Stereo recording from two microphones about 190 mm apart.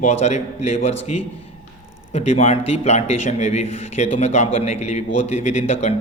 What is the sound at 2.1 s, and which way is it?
A man's voice, 35° left (ahead or behind).